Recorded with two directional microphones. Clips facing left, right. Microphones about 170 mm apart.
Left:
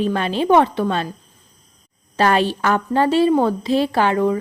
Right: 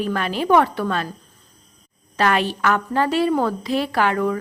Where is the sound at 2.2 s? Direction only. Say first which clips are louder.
Left 3 dB; 30° left (ahead or behind).